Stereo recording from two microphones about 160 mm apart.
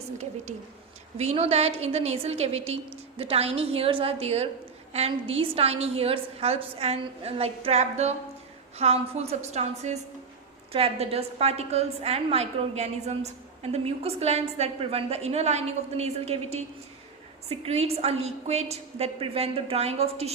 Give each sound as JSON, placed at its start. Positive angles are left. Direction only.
{"t": 1.2, "sound": "a woman's voice", "side_deg": -40}